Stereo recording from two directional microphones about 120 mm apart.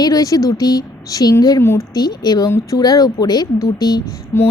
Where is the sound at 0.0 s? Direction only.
30° left (ahead or behind).